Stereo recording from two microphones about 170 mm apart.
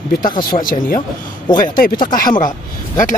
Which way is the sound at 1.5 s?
25° left (ahead or behind).